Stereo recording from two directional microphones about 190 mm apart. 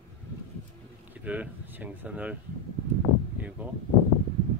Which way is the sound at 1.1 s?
10° right (ahead or behind).